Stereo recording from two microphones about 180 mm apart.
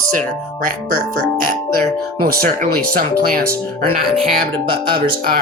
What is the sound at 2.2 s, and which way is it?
Speech, 55° right (ahead or behind).